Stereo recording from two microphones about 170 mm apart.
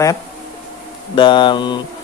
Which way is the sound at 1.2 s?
30° left (ahead or behind).